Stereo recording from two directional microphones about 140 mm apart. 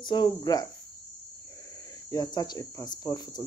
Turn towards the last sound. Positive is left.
turn(degrees=30)  # may be behind; listen again after turning